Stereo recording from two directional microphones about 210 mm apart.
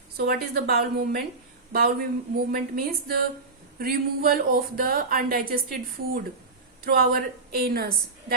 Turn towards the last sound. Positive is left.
turn(degrees=-45)  # may be behind; listen again after turning